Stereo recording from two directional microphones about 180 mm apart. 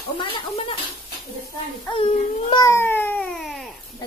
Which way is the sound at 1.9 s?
30° left (ahead or behind).